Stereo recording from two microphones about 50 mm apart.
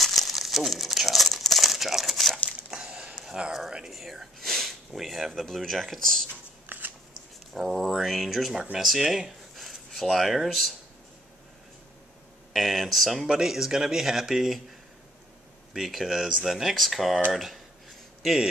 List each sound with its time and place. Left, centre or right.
0.0 s crumpling: centre
2.7 s a sound: centre
3.3 s speech: centre
3.9 s speech: centre
6.7 s scissors: right
7.5 s speech: centre
12.5 s speech: centre
15.7 s speech: centre
17.3 s a sound: centre